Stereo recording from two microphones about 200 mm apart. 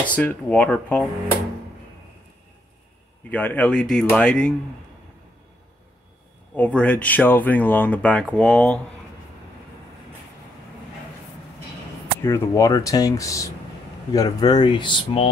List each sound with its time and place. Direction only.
0.0 s speech: 5° left (ahead or behind)
3.3 s speech: 10° left (ahead or behind)
6.5 s speech: 5° left (ahead or behind)
12.2 s speech: 15° left (ahead or behind)